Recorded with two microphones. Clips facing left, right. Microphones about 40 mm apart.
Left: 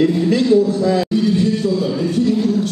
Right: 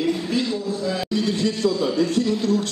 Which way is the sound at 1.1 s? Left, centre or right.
Right.